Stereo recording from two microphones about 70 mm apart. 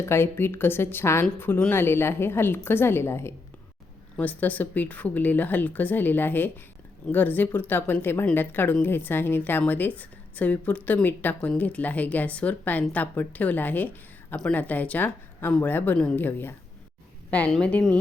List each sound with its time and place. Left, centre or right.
0.0 s a woman's voice: left
4.2 s a woman's voice: left
17.6 s a woman's voice: centre